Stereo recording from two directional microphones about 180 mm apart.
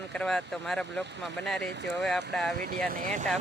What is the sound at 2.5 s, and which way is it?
Speech, 50° right (ahead or behind).